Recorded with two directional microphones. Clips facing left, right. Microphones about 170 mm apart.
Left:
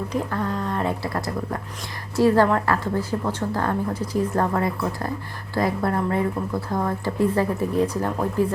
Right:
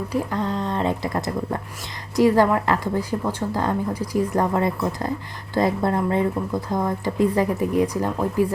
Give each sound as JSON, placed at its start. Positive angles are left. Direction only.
{"t": 0.1, "sound": "a woman's voice", "side_deg": -20}